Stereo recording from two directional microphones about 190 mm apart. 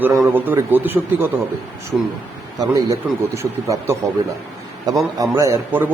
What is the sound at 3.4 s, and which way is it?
A man's voice, 15° right (ahead or behind).